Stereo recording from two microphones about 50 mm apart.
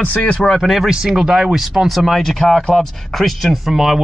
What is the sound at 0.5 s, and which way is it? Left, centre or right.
Speech, centre.